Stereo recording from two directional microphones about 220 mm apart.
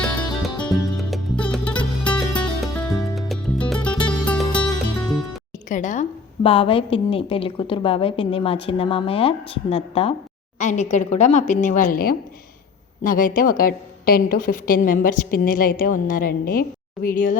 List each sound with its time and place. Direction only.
0.6 s music: 5° left (ahead or behind)
5.6 s a woman's voice: 35° left (ahead or behind)